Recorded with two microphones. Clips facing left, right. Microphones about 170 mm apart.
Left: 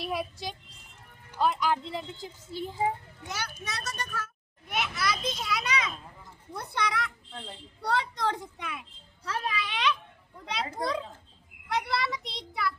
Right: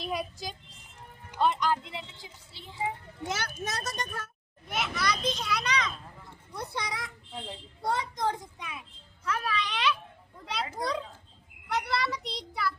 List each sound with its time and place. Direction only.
0.0 s child singing: centre (ahead or behind)
1.4 s a child's voice: centre (ahead or behind)
1.8 s a woman's voice: 40° left (ahead or behind)
3.4 s a child's voice: 45° right (ahead or behind)
4.7 s a child's voice: centre (ahead or behind)
6.5 s a child's voice: 60° left (ahead or behind)
9.2 s a child's voice: 30° left (ahead or behind)
9.6 s a child's voice: centre (ahead or behind)